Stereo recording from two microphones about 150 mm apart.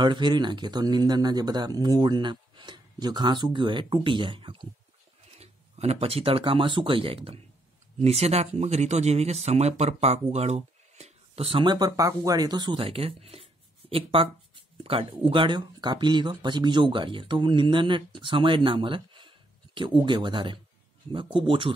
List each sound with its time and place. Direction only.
0.0 s speech: 30° right (ahead or behind)